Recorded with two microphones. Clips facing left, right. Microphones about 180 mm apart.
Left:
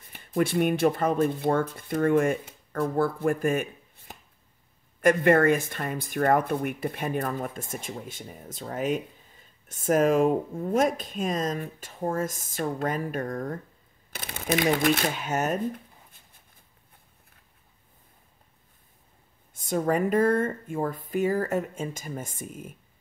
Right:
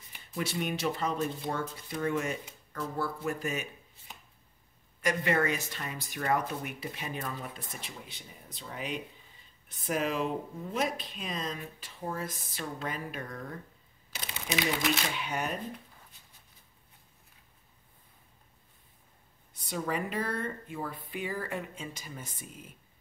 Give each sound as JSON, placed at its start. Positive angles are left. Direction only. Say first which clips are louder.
{"t": 0.0, "sound": "speech", "louder": "left 10 dB", "side_deg": 55}
{"t": 19.5, "sound": "speech", "louder": "left 8 dB", "side_deg": 45}